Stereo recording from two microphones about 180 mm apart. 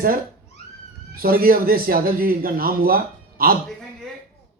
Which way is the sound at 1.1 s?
55° right (ahead or behind).